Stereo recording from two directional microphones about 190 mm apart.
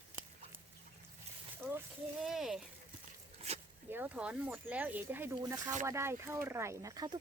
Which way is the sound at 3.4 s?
30° right (ahead or behind).